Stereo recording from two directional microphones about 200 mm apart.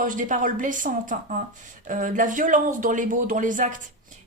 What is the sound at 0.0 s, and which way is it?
A woman's voice, 40° right (ahead or behind).